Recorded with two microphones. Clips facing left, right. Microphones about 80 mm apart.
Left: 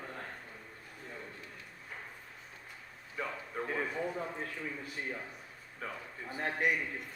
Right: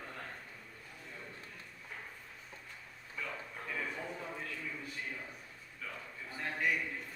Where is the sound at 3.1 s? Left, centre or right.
Left.